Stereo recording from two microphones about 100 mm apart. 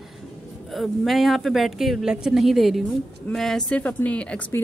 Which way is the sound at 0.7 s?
Centre (ahead or behind).